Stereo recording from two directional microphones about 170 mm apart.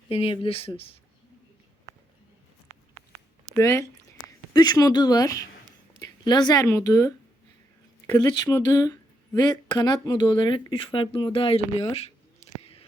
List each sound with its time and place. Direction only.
0.1 s speech: 35° left (ahead or behind)
3.6 s speech: 15° left (ahead or behind); by 12.8 s 40° left (ahead or behind)